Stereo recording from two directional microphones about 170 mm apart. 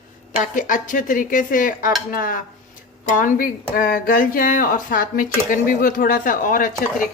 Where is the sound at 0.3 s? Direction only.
50° left (ahead or behind).